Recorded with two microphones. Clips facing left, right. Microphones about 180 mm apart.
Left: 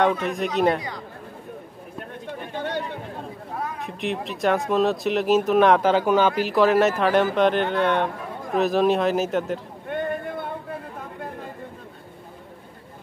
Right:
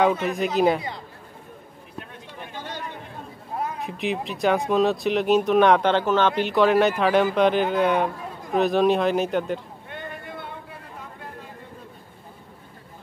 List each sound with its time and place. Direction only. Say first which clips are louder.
0.0 s speech: right 1 dB; 5° right (ahead or behind)
2.0 s a sound: left 5 dB; 55° left (ahead or behind)
3.8 s speech: right 1 dB; centre (ahead or behind)
9.8 s vehicle: left 11 dB; 55° left (ahead or behind)